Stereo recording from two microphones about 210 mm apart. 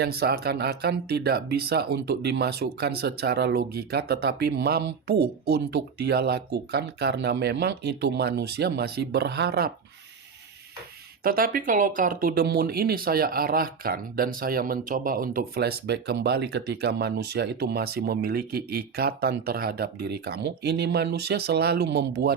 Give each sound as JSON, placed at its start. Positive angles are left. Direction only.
{"t": 0.0, "sound": "speech", "side_deg": -50}
{"t": 11.2, "sound": "speech", "side_deg": -45}